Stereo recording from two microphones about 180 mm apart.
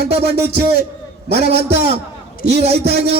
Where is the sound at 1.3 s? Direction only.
65° right (ahead or behind).